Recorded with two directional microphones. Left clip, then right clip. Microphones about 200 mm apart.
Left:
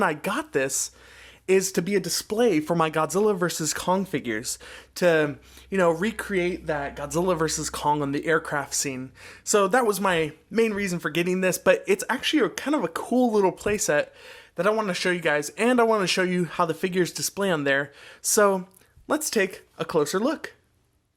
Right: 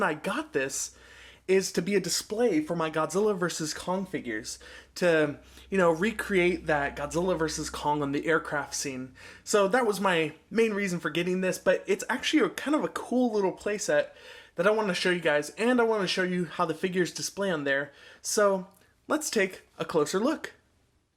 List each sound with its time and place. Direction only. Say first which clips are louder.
0.0 s speech: left 4 dB; 25° left (ahead or behind)
2.2 s speech: left 4 dB; 45° left (ahead or behind); by 7.1 s 15° left (ahead or behind)
7.1 s speech: left 7 dB; 35° left (ahead or behind)
14.5 s speech: left 2 dB; 25° left (ahead or behind)